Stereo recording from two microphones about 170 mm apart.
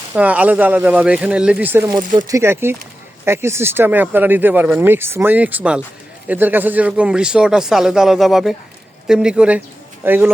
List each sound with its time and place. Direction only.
0.1 s speech: 10° right (ahead or behind)